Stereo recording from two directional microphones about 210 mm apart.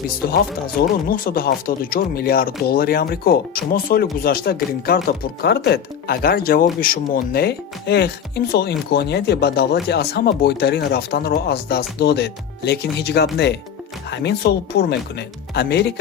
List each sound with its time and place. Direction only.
0.3 s speech: 45° left (ahead or behind)